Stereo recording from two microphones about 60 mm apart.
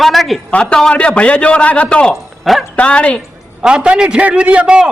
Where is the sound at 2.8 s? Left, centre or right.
Left.